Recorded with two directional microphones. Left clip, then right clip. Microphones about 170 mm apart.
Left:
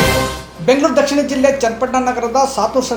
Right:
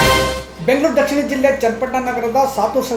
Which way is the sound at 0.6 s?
30° left (ahead or behind).